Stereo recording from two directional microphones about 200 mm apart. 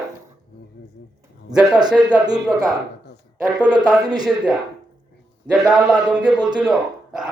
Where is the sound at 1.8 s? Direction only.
20° right (ahead or behind).